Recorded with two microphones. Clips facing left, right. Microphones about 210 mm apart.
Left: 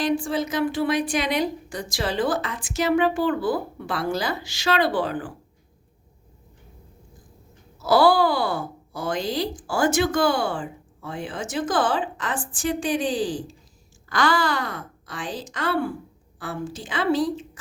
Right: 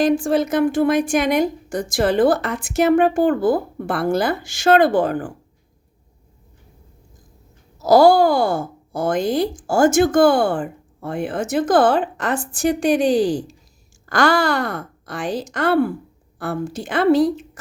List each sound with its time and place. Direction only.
0.0 s a woman's voice: 45° right (ahead or behind)
7.8 s a woman's voice: 40° right (ahead or behind); by 17.6 s 60° right (ahead or behind)